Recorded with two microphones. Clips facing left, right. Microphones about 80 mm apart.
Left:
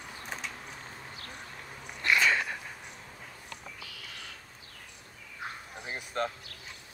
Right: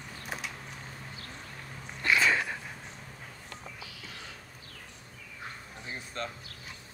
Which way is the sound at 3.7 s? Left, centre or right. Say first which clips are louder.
Right 1 dB; right.